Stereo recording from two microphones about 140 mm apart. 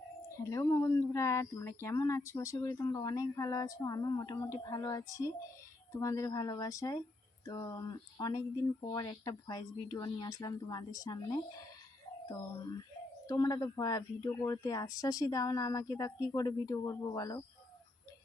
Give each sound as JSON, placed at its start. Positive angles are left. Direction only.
{"t": 0.4, "sound": "speech", "side_deg": 25}